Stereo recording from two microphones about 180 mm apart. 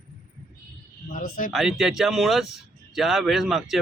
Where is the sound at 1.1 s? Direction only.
50° left (ahead or behind).